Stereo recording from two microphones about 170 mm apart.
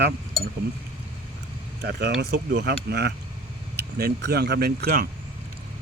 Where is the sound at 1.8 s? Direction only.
80° right.